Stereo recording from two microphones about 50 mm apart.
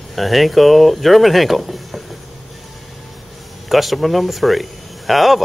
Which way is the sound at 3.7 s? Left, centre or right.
Centre.